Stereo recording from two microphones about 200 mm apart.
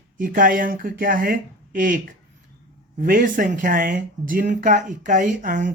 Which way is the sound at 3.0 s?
45° right (ahead or behind).